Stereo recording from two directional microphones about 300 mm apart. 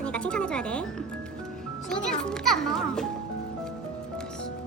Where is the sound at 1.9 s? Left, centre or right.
Centre.